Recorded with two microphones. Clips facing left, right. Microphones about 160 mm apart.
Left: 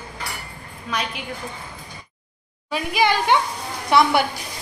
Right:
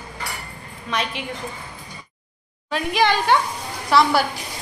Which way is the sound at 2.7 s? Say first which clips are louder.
Right 1 dB; 10° left (ahead or behind).